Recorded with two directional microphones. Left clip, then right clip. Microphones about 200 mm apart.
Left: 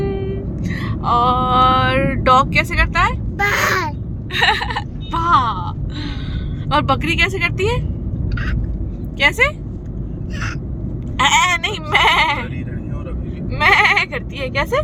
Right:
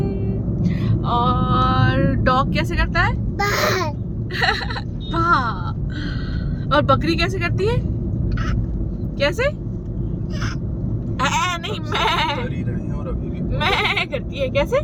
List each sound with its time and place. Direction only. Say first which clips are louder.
0.6 s a sound: left 4 dB; 20° left (ahead or behind)
3.3 s a sound: left 2 dB; 5° right (ahead or behind)
4.4 s speech: left 5 dB; 20° left (ahead or behind)
6.7 s speech: left 1 dB; 20° left (ahead or behind)
9.1 s speech: left 6 dB; 20° left (ahead or behind)
11.2 s sheep: left 7 dB; 20° left (ahead or behind)
13.6 s speech: left 7 dB; 15° left (ahead or behind)